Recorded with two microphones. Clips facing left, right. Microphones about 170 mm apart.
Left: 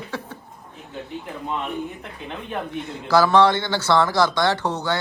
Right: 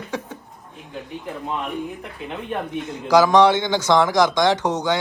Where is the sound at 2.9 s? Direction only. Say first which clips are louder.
Right 2 dB; 15° right (ahead or behind).